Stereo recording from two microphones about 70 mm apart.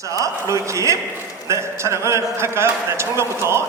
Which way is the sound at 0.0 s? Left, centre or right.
Right.